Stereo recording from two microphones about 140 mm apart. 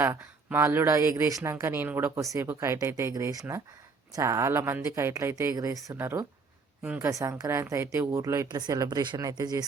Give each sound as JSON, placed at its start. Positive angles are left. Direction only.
{"t": 0.0, "sound": "a woman's voice", "side_deg": -15}